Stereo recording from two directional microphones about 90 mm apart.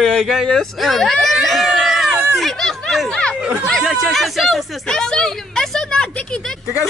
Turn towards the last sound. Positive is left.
turn(degrees=10)  # may be behind; listen again after turning